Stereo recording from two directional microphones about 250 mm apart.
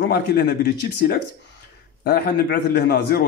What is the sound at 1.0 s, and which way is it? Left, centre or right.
A man's voice, left.